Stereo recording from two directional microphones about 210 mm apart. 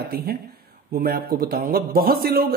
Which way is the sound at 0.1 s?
50° right (ahead or behind).